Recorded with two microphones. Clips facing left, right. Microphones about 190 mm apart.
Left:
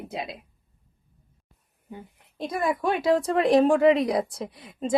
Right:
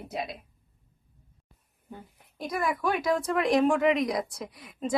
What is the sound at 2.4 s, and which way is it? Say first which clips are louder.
Speech: left 3 dB; 25° left (ahead or behind).